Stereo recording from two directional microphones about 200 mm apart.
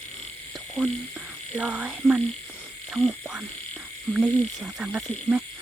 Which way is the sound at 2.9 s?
5° right (ahead or behind).